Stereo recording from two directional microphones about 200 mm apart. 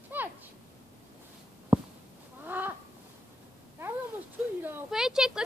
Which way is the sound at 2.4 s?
10° right (ahead or behind).